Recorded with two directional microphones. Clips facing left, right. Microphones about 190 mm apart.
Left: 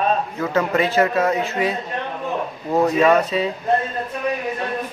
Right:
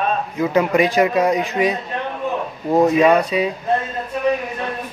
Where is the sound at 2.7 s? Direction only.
15° right (ahead or behind).